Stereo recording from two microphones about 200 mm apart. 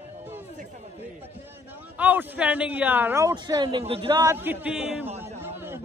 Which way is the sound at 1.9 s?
10° right (ahead or behind).